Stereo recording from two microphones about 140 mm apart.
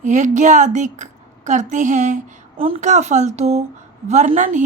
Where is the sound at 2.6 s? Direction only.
40° right (ahead or behind).